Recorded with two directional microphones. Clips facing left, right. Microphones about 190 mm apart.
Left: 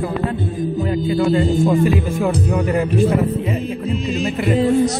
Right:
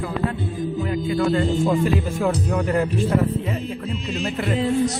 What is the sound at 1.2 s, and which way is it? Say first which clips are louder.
Speech: left 4 dB; 5° left (ahead or behind).